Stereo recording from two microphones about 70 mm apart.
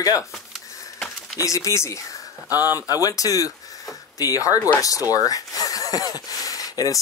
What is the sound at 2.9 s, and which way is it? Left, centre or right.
Speech, left.